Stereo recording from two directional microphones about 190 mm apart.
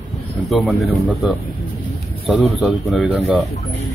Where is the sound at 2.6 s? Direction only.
Centre (ahead or behind).